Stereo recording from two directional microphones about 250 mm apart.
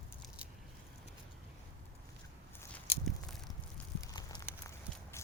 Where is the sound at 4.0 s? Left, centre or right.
Centre.